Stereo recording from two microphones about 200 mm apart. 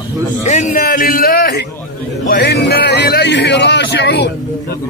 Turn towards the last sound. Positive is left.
turn(degrees=60)  # may be behind; listen again after turning